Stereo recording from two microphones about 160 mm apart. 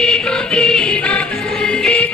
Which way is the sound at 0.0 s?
5° left (ahead or behind).